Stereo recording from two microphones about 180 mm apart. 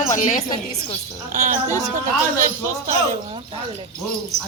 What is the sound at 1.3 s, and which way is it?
Speech, 45° right (ahead or behind).